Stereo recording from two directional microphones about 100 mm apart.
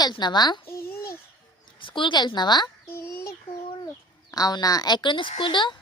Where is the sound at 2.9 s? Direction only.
25° left (ahead or behind).